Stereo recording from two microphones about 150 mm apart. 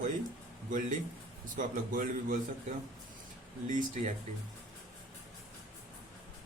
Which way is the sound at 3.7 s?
60° right (ahead or behind).